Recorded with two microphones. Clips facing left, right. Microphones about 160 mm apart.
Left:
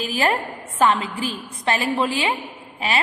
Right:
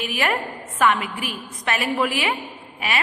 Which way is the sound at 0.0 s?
30° left (ahead or behind).